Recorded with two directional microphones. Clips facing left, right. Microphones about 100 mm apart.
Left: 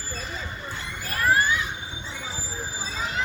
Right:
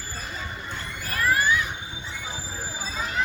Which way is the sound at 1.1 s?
30° left (ahead or behind).